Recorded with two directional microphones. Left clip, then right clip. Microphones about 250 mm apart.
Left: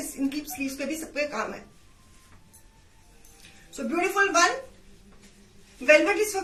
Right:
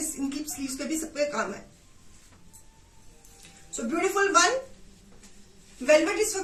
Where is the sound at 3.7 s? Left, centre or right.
Centre.